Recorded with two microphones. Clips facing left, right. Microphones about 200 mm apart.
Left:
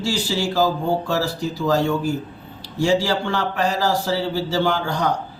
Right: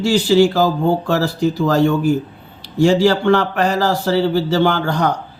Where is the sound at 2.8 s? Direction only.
65° right (ahead or behind).